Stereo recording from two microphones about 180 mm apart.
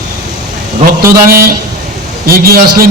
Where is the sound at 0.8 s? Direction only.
55° right (ahead or behind).